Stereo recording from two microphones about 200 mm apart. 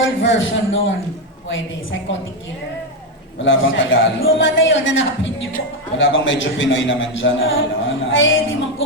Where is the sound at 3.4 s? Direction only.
70° left (ahead or behind).